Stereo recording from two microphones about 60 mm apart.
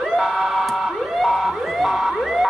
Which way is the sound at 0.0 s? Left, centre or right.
Centre.